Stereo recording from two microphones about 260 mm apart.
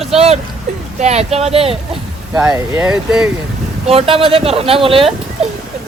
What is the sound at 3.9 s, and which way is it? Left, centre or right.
Speech, right.